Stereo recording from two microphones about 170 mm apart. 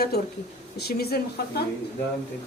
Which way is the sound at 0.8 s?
70° left (ahead or behind).